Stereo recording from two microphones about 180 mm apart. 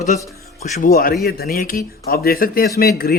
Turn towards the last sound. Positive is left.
turn(degrees=55)  # may be behind; listen again after turning